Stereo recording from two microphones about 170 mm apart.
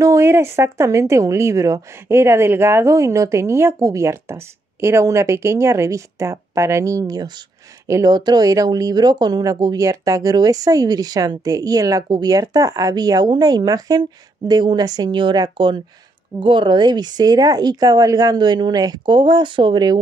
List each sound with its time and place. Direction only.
0.0 s speech: 15° right (ahead or behind)